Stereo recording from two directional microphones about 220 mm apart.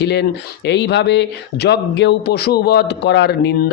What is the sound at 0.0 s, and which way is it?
Speech, 50° left (ahead or behind).